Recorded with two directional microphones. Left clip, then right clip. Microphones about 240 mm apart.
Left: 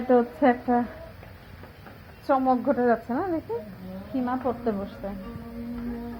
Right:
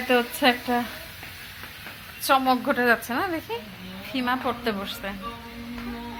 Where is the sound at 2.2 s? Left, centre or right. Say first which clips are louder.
Right 2 dB; centre.